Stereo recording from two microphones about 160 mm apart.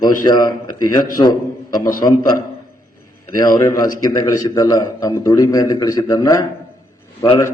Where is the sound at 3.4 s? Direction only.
25° left (ahead or behind).